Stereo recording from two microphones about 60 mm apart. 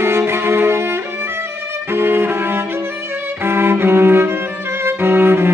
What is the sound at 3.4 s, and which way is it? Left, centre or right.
Cello, right.